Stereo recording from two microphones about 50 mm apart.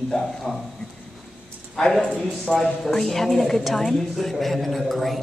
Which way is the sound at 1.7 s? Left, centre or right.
Centre.